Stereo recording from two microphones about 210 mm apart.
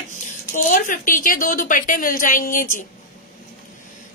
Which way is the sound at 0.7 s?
40° left (ahead or behind).